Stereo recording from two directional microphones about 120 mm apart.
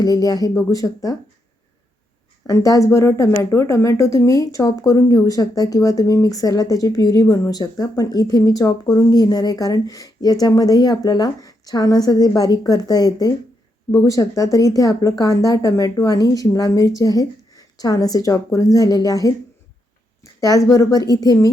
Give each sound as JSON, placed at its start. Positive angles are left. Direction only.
{"t": 0.0, "sound": "speech", "side_deg": 30}
{"t": 2.5, "sound": "a woman's voice", "side_deg": 25}
{"t": 20.4, "sound": "a woman's voice", "side_deg": 30}